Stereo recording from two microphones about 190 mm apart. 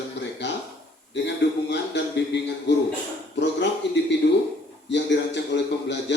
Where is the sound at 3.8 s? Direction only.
65° left (ahead or behind).